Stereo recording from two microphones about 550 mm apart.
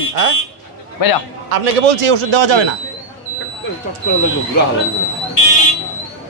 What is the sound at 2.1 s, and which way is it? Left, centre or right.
Speech, right.